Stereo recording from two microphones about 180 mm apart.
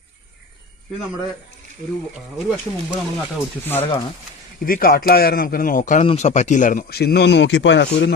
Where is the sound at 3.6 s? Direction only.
10° left (ahead or behind).